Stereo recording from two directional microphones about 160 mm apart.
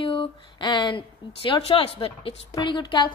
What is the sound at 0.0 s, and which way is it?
A woman's voice, 30° left (ahead or behind).